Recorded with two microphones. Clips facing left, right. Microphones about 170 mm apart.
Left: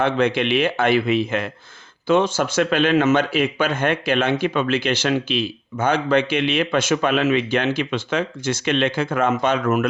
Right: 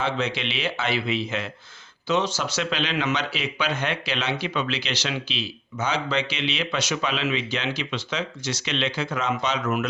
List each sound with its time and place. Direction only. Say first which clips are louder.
0.0 s speech: left 8 dB; 55° left (ahead or behind)